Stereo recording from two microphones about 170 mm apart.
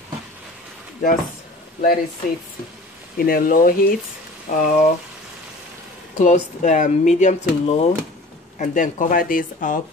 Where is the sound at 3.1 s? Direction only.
60° left (ahead or behind).